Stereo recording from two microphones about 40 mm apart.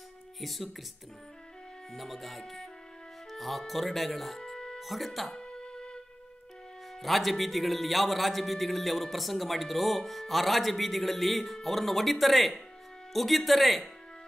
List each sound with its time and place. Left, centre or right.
0.4 s a man's voice: centre
1.9 s a man's voice: centre
4.4 s music: centre
4.7 s a man's voice: centre
5.3 s music: centre
7.0 s a man's voice: centre